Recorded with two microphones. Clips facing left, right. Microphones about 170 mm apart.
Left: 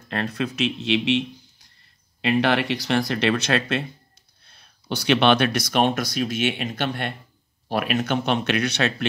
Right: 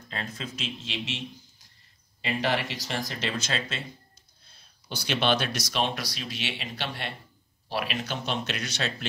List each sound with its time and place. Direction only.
0.1 s speech: 65° left (ahead or behind)
2.2 s speech: 70° left (ahead or behind)